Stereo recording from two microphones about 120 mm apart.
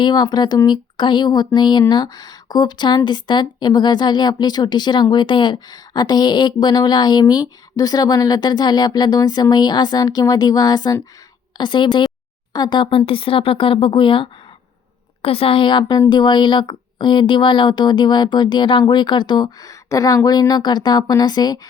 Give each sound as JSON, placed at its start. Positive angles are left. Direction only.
{"t": 0.0, "sound": "speech", "side_deg": 35}